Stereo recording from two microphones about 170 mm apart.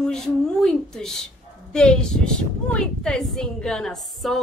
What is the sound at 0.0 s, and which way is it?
A woman's voice, 5° left (ahead or behind).